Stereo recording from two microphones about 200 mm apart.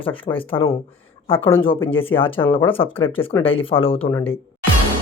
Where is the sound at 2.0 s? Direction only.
25° left (ahead or behind).